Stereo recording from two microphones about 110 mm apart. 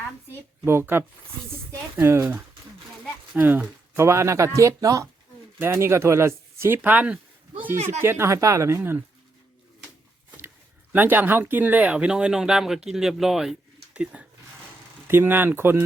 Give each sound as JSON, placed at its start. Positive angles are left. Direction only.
{"t": 0.3, "sound": "speech", "side_deg": -20}
{"t": 3.3, "sound": "speech", "side_deg": -15}
{"t": 10.9, "sound": "speech", "side_deg": -15}
{"t": 15.0, "sound": "speech", "side_deg": -20}